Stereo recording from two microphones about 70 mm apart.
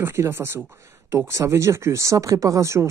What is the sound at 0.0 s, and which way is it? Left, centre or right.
Speech, right.